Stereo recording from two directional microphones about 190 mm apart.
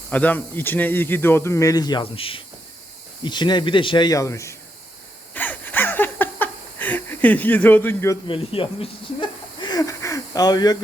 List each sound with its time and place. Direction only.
0.1 s speech: 10° left (ahead or behind)
5.3 s a sound: 10° left (ahead or behind)
8.3 s speech: 30° left (ahead or behind)
9.6 s hiss: 20° left (ahead or behind)